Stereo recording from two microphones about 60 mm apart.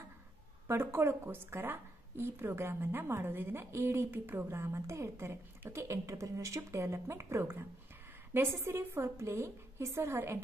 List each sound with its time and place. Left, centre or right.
0.7 s a woman's voice: right